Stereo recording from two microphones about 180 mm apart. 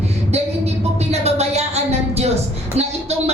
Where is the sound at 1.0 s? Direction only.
35° right (ahead or behind).